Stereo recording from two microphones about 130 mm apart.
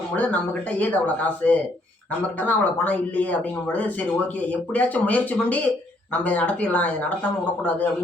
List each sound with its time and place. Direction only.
0.8 s speech: 10° left (ahead or behind)
4.7 s speech: 10° left (ahead or behind)